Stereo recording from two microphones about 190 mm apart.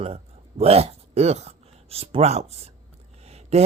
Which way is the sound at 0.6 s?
30° right (ahead or behind).